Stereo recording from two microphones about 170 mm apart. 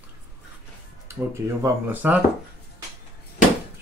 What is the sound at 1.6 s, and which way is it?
Speech, 10° right (ahead or behind).